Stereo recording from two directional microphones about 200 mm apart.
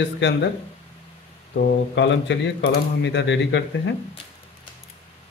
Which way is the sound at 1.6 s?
60° left (ahead or behind).